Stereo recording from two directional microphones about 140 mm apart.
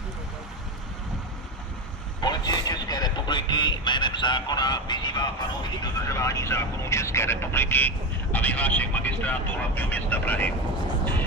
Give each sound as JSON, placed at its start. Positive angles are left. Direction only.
{"t": 2.2, "sound": "speech", "side_deg": 30}